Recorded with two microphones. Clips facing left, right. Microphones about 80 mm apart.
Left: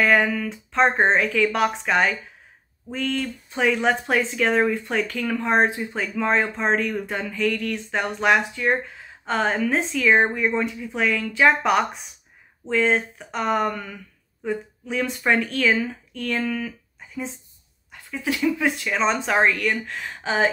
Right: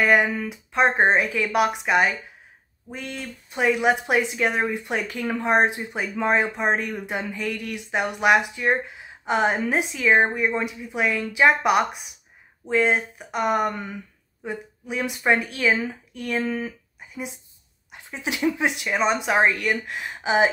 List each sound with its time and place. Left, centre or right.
0.0 s speech: centre; by 17.2 s right
17.9 s a sound: right
18.4 s speech: right